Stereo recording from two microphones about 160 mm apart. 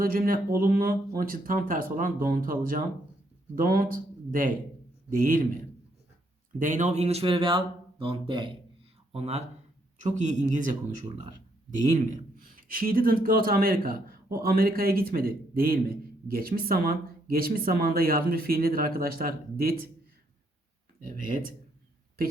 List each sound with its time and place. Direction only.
0.0 s a man's voice: 60° right (ahead or behind)
6.6 s speech: 50° right (ahead or behind); by 8.5 s 30° right (ahead or behind)
9.1 s speech: 40° right (ahead or behind)
11.9 s a man's voice: 55° right (ahead or behind)